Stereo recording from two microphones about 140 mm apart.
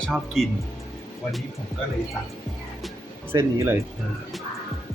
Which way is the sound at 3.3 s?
25° right (ahead or behind).